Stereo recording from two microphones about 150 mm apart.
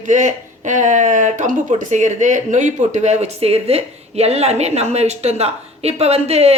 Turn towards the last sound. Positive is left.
turn(degrees=-45)  # may be behind; listen again after turning